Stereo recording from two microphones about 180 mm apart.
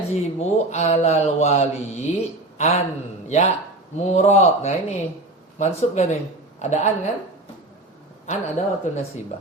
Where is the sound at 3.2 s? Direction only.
40° left (ahead or behind).